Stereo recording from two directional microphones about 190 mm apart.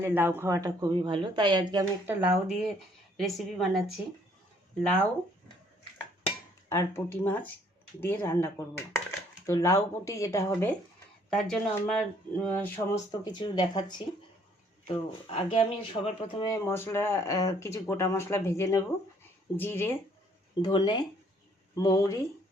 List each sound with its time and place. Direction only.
0.0 s a woman's voice: 10° right (ahead or behind)
2.0 s speech: 5° right (ahead or behind)
6.7 s speech: 15° left (ahead or behind)
11.3 s speech: 5° left (ahead or behind)
13.1 s speech: 25° left (ahead or behind)
20.6 s speech: 20° left (ahead or behind)